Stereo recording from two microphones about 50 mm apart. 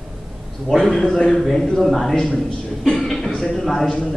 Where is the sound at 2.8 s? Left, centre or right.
Centre.